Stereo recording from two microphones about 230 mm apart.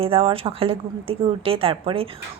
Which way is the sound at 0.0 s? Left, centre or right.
Right.